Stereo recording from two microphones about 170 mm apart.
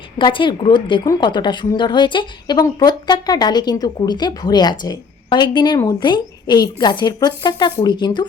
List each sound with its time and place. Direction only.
0.2 s a woman's voice: 30° left (ahead or behind)